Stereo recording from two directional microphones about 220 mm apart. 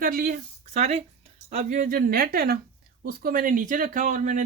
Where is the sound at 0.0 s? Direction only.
40° right (ahead or behind).